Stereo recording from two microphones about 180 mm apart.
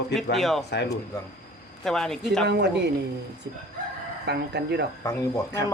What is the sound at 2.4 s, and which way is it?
Speech, 70° right (ahead or behind).